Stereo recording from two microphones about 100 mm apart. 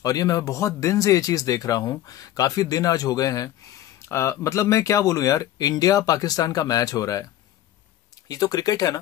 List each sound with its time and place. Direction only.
0.0 s speech: 35° left (ahead or behind)
8.3 s speech: 40° left (ahead or behind)